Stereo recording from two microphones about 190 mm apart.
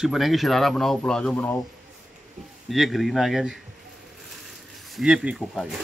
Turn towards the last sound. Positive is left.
turn(degrees=-5)  # may be behind; listen again after turning